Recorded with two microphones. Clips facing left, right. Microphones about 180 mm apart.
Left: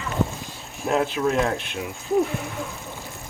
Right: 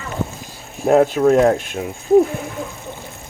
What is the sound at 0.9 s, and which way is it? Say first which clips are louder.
Speech: right 9 dB; 45° right (ahead or behind).